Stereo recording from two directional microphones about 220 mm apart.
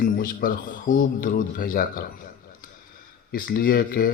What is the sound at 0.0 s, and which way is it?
Speech, 40° left (ahead or behind).